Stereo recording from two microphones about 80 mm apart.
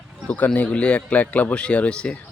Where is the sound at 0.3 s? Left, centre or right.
Centre.